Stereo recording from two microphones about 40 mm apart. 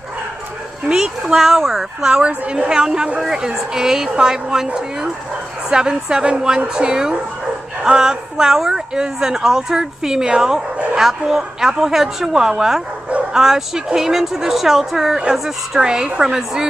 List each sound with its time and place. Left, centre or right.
0.9 s speech: centre
2.5 s a woman's voice: centre
5.7 s speech: centre
15.8 s speech: centre